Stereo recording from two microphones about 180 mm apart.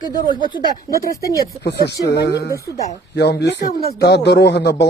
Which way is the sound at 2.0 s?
70° left (ahead or behind).